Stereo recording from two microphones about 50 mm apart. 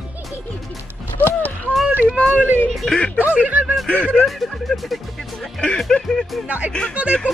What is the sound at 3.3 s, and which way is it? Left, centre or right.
Music, right.